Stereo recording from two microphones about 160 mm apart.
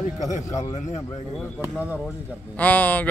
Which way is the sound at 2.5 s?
10° left (ahead or behind).